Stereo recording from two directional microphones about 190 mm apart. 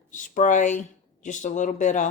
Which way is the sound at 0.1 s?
40° left (ahead or behind).